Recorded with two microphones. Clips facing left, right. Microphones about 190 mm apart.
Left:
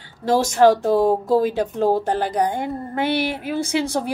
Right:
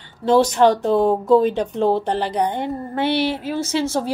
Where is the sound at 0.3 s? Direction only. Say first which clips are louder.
Right 1 dB; 10° left (ahead or behind).